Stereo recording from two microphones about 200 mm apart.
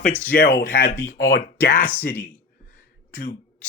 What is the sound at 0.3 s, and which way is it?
Speech, 45° left (ahead or behind).